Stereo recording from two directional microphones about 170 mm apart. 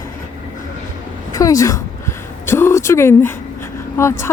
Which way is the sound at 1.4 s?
20° left (ahead or behind).